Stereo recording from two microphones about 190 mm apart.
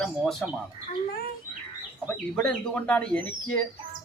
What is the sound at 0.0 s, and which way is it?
Speech, centre (ahead or behind).